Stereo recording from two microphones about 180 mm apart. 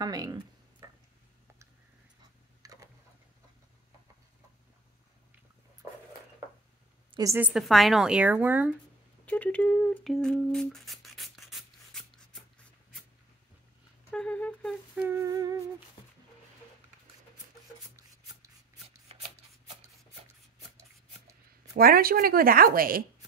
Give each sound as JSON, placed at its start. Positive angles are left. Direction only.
{"t": 0.0, "sound": "a sound", "side_deg": -20}
{"t": 2.6, "sound": "tick-tock", "side_deg": -20}
{"t": 7.2, "sound": "a woman's voice", "side_deg": -15}
{"t": 9.2, "sound": "humming", "side_deg": 10}
{"t": 14.1, "sound": "humming", "side_deg": 5}
{"t": 15.0, "sound": "a woman's voice", "side_deg": -15}
{"t": 19.1, "sound": "shuffling cards", "side_deg": -30}
{"t": 21.7, "sound": "speech", "side_deg": -55}